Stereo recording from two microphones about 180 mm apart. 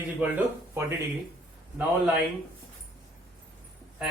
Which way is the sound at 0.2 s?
10° right (ahead or behind).